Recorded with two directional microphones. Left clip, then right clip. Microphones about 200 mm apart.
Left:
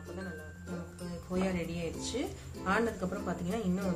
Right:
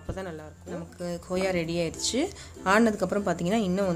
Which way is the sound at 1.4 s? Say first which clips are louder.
Right 11 dB; 60° right (ahead or behind).